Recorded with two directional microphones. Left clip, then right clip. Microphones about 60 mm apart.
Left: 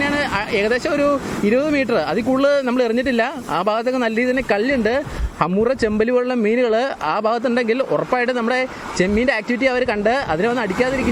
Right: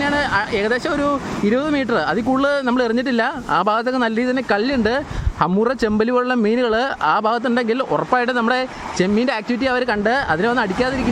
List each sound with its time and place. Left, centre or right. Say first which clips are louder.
0.0 s speech: right 1 dB; centre
2.6 s speech: even; right
7.8 s speech: right 1 dB; right